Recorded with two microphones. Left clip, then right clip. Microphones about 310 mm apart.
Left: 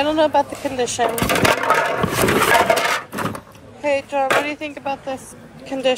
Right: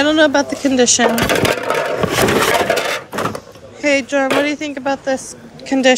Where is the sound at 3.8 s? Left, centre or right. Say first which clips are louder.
Right 4 dB; right.